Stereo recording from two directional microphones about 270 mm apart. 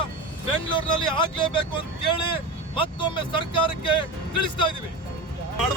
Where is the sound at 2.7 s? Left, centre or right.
Centre.